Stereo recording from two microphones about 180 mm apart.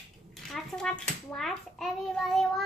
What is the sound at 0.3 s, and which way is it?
A child's voice, centre (ahead or behind).